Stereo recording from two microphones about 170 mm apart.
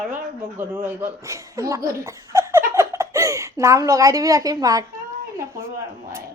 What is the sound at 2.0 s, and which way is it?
Giggle, 15° right (ahead or behind).